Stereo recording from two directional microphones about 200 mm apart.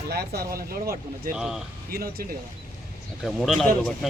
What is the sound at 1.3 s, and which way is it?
Speech, 5° right (ahead or behind).